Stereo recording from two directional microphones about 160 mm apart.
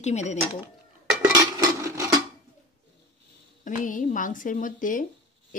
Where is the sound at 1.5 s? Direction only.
20° right (ahead or behind).